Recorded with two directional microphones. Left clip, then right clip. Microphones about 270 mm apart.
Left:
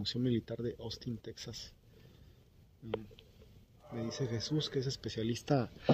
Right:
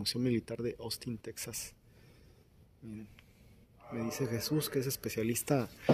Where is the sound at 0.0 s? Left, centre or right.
Centre.